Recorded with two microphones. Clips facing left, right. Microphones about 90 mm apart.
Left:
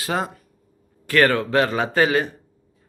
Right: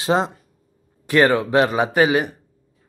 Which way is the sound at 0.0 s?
25° right (ahead or behind).